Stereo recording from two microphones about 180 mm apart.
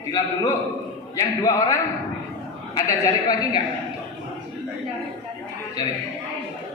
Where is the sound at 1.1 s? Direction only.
20° left (ahead or behind).